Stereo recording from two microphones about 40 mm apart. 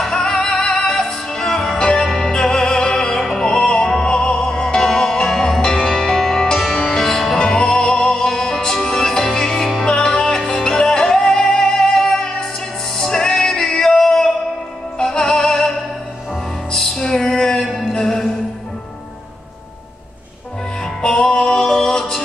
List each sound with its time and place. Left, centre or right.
0.0 s music: centre
9.8 s music: centre
21.0 s music: centre